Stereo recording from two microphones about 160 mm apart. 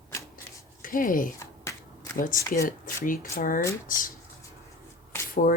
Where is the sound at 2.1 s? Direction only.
60° left (ahead or behind).